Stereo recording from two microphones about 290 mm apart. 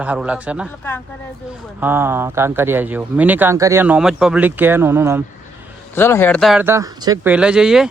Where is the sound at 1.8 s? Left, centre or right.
Centre.